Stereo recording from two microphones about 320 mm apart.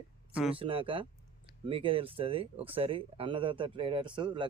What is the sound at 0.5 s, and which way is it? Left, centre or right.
Speech, centre.